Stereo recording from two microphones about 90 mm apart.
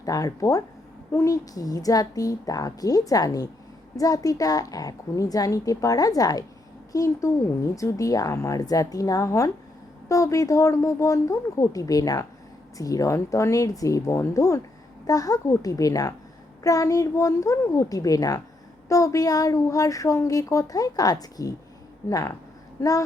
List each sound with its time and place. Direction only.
0.0 s a woman's voice: 40° left (ahead or behind)
22.8 s speech: 35° left (ahead or behind)